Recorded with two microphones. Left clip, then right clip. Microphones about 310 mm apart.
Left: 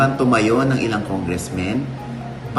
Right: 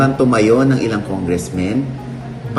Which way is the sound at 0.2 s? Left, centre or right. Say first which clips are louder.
Right 4 dB; centre.